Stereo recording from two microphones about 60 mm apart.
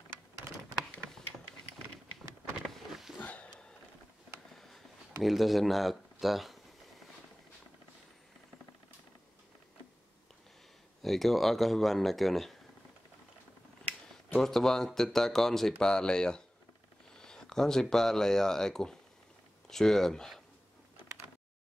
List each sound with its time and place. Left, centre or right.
2.6 s power windows: centre
3.2 s a sound: left
4.6 s a sound: centre
5.2 s speech: centre
11.0 s speech: centre
14.4 s speech: centre